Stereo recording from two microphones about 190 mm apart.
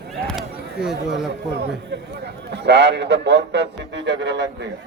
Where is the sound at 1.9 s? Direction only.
60° right (ahead or behind).